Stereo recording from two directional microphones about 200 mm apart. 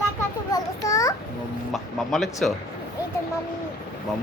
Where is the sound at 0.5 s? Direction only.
15° left (ahead or behind).